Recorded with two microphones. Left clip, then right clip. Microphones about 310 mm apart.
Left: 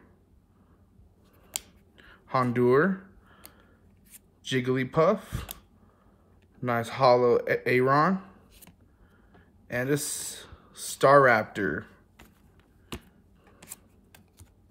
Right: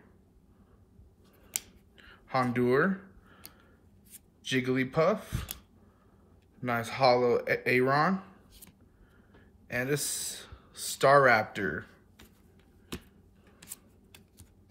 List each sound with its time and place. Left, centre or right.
1.5 s finger snapping: centre
4.5 s speech: centre
6.6 s speech: centre
7.8 s a sound: centre
9.7 s speech: centre
12.9 s a sound: centre